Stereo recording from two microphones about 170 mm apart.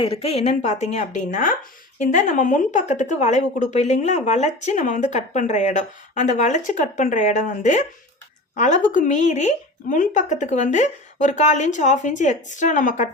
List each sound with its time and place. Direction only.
0.0 s a woman's voice: 35° left (ahead or behind)